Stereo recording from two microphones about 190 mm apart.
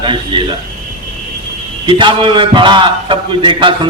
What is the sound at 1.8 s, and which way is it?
A man's voice, 25° right (ahead or behind).